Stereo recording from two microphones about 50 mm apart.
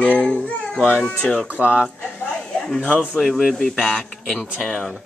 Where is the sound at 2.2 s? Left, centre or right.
Centre.